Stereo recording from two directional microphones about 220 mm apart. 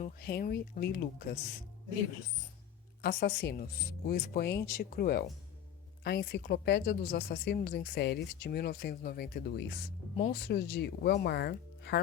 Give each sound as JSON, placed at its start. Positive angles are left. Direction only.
{"t": 0.0, "sound": "speech", "side_deg": 45}
{"t": 3.0, "sound": "speech", "side_deg": 45}